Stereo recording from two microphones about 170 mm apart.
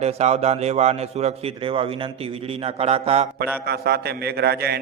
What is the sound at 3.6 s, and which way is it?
A man's voice, 70° right (ahead or behind).